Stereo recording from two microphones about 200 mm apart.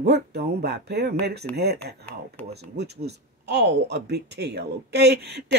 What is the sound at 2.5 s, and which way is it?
Speech, 55° right (ahead or behind).